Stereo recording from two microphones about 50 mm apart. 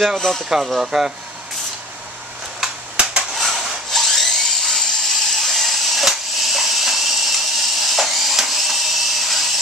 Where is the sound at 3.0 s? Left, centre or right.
Right.